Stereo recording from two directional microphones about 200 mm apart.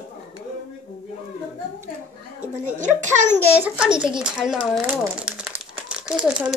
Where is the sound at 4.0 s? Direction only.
5° right (ahead or behind).